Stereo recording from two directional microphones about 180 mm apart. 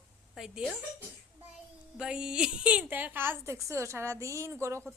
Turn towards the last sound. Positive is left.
turn(degrees=-15)  # may be behind; listen again after turning